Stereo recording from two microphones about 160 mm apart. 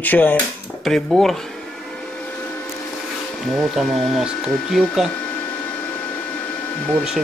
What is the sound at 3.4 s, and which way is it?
Speech, centre (ahead or behind).